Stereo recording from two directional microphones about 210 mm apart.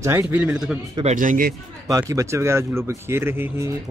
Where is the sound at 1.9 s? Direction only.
15° right (ahead or behind).